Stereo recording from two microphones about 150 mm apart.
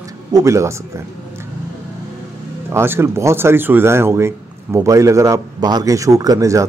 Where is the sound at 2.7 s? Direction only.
15° right (ahead or behind).